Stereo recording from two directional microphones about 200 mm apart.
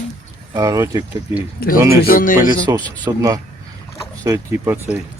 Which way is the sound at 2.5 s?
15° right (ahead or behind).